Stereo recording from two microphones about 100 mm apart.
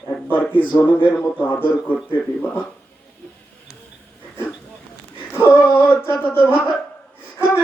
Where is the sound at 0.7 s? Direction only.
20° left (ahead or behind).